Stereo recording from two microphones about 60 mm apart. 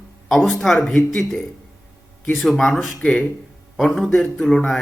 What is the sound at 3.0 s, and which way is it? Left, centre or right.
Speech, left.